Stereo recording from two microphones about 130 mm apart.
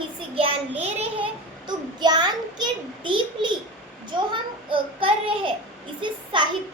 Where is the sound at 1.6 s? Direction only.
35° right (ahead or behind).